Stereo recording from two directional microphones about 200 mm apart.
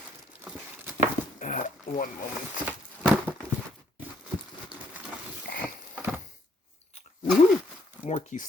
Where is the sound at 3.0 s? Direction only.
Centre (ahead or behind).